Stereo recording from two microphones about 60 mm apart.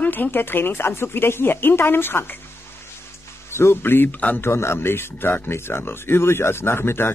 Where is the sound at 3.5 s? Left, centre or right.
Left.